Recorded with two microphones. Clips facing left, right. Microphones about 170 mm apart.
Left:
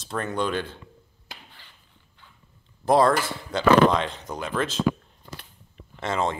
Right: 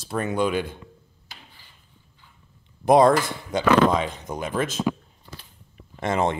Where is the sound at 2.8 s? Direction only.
15° right (ahead or behind).